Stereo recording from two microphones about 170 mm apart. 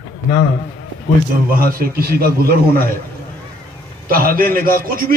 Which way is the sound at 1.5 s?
60° right (ahead or behind).